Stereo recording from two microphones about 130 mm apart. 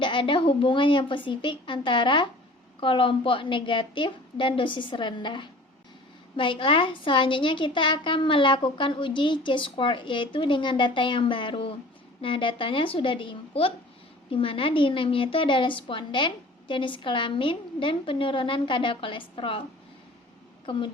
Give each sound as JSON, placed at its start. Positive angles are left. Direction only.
{"t": 0.0, "sound": "a woman's voice", "side_deg": 40}
{"t": 20.7, "sound": "a woman's voice", "side_deg": 40}